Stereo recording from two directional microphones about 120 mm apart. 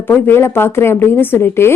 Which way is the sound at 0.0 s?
20° left (ahead or behind).